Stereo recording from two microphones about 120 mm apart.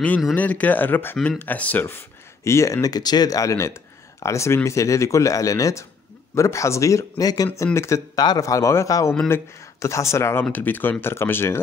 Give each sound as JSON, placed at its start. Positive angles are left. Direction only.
{"t": 0.4, "sound": "speech", "side_deg": 15}
{"t": 1.1, "sound": "speech", "side_deg": 0}
{"t": 1.4, "sound": "speech", "side_deg": 15}